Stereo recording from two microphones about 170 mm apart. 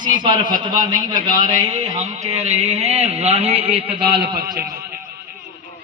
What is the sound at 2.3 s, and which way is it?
A man's voice, 40° right (ahead or behind).